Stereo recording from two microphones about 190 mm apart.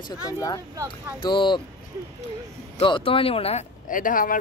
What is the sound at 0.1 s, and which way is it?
Speech, 20° left (ahead or behind).